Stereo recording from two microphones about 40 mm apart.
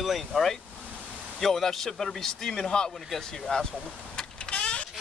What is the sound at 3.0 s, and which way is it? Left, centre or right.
Speech, centre.